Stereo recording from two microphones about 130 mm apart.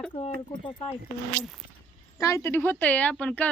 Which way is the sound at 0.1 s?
35° left (ahead or behind).